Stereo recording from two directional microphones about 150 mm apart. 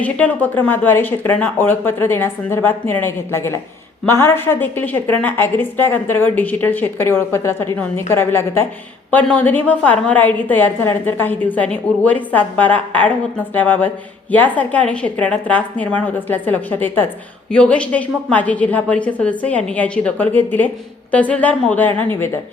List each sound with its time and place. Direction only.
0.0 s a woman's voice: 10° left (ahead or behind)